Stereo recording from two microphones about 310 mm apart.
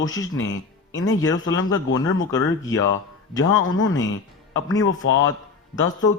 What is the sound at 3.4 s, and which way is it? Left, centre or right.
A man's voice, left.